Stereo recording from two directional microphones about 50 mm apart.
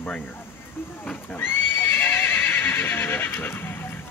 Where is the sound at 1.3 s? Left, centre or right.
Left.